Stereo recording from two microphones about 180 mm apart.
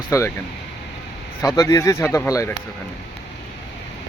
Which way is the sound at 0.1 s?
15° left (ahead or behind).